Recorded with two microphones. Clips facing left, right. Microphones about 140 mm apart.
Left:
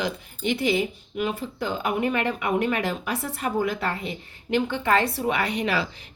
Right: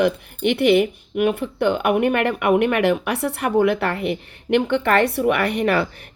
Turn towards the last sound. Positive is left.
turn(degrees=-55)  # may be behind; listen again after turning